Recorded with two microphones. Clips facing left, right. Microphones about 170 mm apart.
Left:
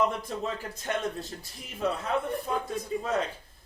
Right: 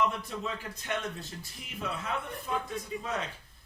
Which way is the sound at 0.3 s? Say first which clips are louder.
Left 4 dB; 40° left (ahead or behind).